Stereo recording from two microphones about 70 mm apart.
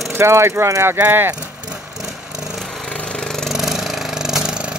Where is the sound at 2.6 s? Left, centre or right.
Centre.